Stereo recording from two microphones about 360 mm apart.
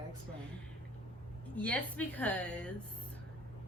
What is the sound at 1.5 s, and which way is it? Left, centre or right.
Speech, centre.